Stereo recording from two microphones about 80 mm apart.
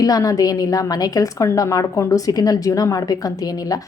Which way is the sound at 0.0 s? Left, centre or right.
Left.